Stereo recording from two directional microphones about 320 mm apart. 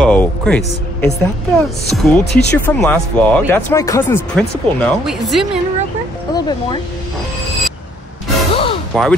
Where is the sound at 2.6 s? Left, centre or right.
Centre.